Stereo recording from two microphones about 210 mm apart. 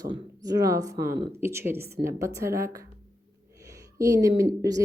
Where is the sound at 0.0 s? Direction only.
15° right (ahead or behind).